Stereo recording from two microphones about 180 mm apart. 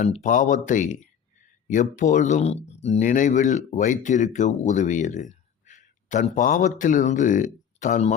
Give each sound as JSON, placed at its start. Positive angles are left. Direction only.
{"t": 0.0, "sound": "speech", "side_deg": 45}